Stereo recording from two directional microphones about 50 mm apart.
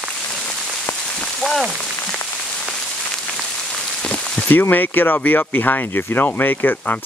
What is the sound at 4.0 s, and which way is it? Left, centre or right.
Rain on surface, left.